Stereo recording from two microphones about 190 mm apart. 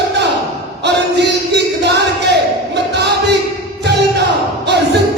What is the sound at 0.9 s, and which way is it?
Battle cry, 65° right (ahead or behind).